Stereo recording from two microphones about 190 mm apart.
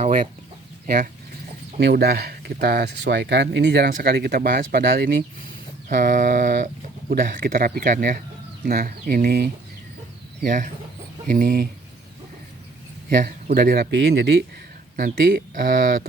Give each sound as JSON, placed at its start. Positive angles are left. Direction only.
{"t": 0.0, "sound": "chicken", "side_deg": -40}
{"t": 1.8, "sound": "speech", "side_deg": -55}
{"t": 10.4, "sound": "speech", "side_deg": -40}
{"t": 13.1, "sound": "speech", "side_deg": -50}
{"t": 13.9, "sound": "speech", "side_deg": -60}
{"t": 15.5, "sound": "speech", "side_deg": -45}